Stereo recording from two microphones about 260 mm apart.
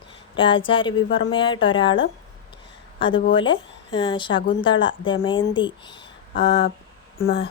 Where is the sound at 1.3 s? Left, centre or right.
Centre.